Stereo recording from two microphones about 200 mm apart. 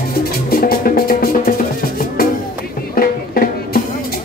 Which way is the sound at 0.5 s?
45° left (ahead or behind).